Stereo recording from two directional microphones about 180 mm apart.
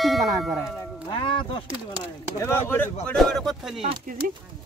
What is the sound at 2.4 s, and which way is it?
Speech, 15° left (ahead or behind).